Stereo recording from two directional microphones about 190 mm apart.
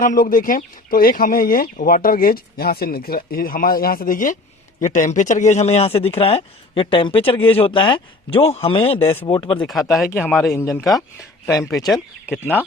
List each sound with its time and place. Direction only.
0.0 s speech: 45° left (ahead or behind); by 9.6 s 25° left (ahead or behind)
9.6 s speech: centre (ahead or behind)
10.5 s speech: 10° left (ahead or behind)